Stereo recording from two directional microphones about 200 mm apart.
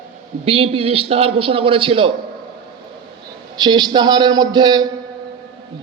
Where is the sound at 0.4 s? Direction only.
30° right (ahead or behind).